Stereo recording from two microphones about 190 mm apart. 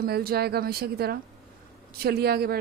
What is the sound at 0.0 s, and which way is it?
A woman's voice, 55° right (ahead or behind).